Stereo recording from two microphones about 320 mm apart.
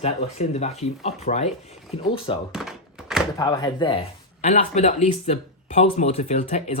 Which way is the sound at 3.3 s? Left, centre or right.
Centre.